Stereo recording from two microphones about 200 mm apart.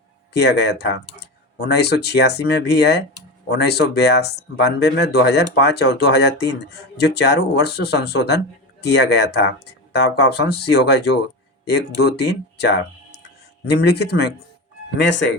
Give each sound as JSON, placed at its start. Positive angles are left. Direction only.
{"t": 0.3, "sound": "speech", "side_deg": 55}